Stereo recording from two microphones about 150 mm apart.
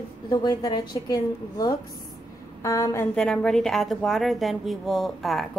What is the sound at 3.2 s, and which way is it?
A woman's voice, 5° left (ahead or behind).